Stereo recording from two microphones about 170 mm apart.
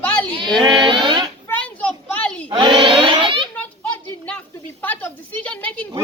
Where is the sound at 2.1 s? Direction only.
10° left (ahead or behind).